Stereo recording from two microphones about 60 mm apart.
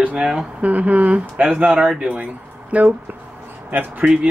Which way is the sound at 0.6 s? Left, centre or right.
Right.